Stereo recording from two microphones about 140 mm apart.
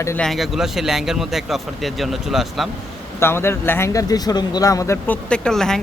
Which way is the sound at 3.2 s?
15° left (ahead or behind).